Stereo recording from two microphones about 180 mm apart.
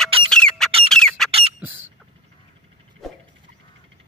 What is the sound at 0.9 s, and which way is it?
Squawk, 5° left (ahead or behind).